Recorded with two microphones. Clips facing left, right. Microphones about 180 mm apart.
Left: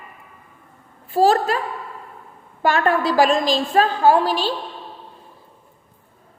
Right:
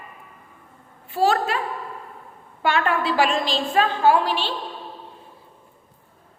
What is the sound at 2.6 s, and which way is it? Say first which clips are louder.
A woman's voice: left 3 dB; 40° left (ahead or behind).